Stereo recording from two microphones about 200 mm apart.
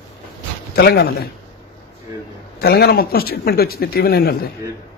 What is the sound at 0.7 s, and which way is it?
Speech, 55° left (ahead or behind).